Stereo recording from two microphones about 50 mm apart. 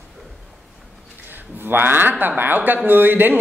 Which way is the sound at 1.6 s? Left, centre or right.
Right.